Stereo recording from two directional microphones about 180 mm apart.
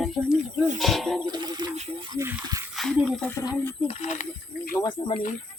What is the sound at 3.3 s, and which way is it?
Speech, 15° left (ahead or behind).